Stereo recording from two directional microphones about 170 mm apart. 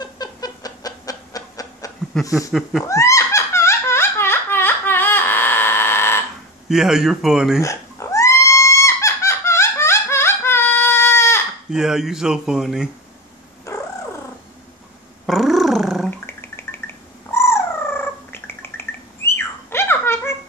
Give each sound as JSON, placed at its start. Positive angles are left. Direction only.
{"t": 0.0, "sound": "chicken", "side_deg": 20}
{"t": 2.9, "sound": "laughter", "side_deg": 20}
{"t": 6.7, "sound": "speech", "side_deg": -5}
{"t": 7.6, "sound": "a sound", "side_deg": 20}
{"t": 11.7, "sound": "speech", "side_deg": -5}
{"t": 15.2, "sound": "dog", "side_deg": 0}
{"t": 16.3, "sound": "cat", "side_deg": 15}